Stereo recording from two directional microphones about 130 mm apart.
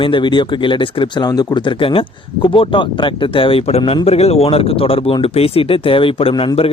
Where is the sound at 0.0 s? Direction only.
40° left (ahead or behind).